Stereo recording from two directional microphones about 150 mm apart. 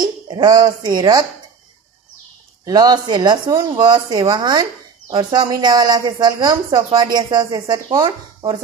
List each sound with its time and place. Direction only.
0.0 s speech: 30° right (ahead or behind)
2.6 s speech: 25° right (ahead or behind)